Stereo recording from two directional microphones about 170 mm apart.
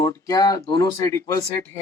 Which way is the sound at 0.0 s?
20° left (ahead or behind).